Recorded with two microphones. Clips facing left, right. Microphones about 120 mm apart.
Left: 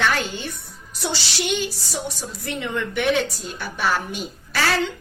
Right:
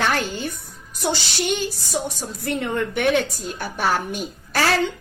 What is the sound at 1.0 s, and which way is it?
A woman's voice, 50° right (ahead or behind).